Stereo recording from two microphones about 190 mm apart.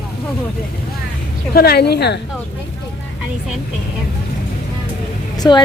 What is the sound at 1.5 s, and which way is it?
Speech, 55° left (ahead or behind).